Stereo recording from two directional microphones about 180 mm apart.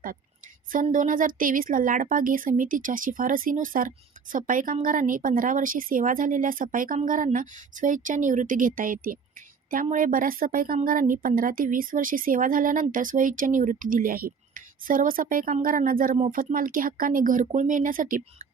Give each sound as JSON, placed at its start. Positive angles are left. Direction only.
{"t": 0.7, "sound": "a woman's voice", "side_deg": -50}
{"t": 16.1, "sound": "speech", "side_deg": -35}
{"t": 16.4, "sound": "a woman's voice", "side_deg": -50}